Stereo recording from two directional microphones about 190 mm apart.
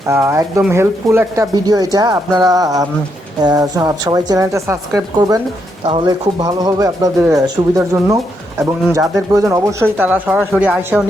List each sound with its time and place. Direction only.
0.1 s speech: 15° right (ahead or behind)